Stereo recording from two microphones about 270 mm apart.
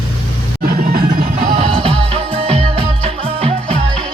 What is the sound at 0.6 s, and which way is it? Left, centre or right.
Music, right.